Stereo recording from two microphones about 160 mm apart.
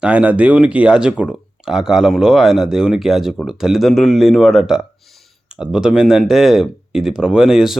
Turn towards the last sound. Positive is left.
turn(degrees=-5)  # may be behind; listen again after turning